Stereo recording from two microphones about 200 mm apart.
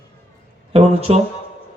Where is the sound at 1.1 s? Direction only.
30° right (ahead or behind).